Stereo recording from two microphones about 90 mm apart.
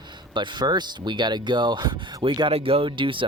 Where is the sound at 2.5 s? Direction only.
90° right; by 3.2 s 70° right (ahead or behind).